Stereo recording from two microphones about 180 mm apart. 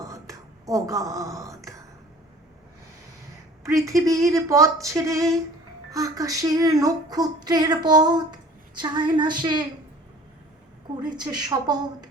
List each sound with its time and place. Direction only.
0.0 s a sound: 20° right (ahead or behind)
3.6 s speech: 15° right (ahead or behind)
11.0 s speech: 25° right (ahead or behind)